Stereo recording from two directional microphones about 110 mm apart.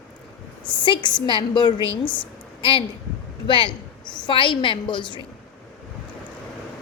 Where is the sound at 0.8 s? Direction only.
45° left (ahead or behind).